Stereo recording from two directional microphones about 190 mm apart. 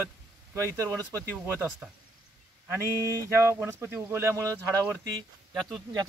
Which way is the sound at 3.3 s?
15° right (ahead or behind).